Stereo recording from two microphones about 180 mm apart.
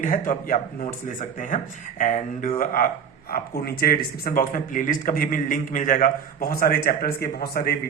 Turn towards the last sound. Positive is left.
turn(degrees=60)  # may be behind; listen again after turning